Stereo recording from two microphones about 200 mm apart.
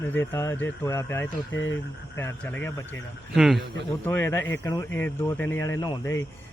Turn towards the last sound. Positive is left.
turn(degrees=20)  # may be behind; listen again after turning